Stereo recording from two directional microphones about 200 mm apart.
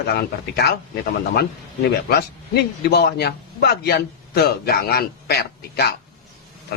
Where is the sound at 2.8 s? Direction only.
55° left (ahead or behind).